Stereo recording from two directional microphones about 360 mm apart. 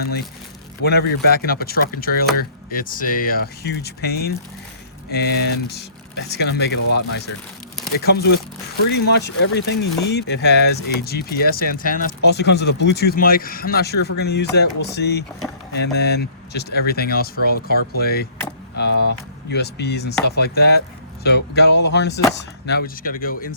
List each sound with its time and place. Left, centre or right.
0.8 s speech: left